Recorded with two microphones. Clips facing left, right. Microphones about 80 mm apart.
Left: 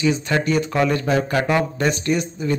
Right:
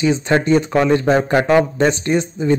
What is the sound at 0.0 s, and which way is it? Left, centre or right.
A man's voice, right.